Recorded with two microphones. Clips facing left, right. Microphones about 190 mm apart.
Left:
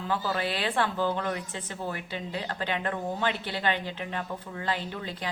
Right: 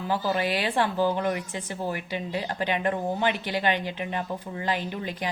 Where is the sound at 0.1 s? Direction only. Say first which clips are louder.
Right 4 dB; 15° right (ahead or behind).